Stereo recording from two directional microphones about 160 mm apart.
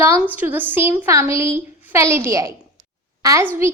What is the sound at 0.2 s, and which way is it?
A woman's voice, 10° right (ahead or behind).